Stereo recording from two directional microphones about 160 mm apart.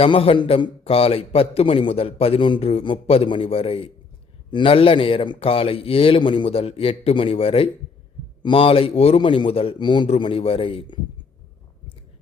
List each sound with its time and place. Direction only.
0.0 s a man's voice: 35° left (ahead or behind)